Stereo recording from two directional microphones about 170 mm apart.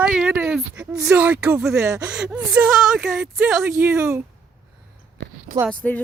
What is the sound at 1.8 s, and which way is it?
Speech, 20° right (ahead or behind).